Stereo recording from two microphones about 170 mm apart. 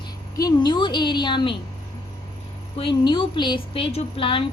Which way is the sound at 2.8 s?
30° left (ahead or behind).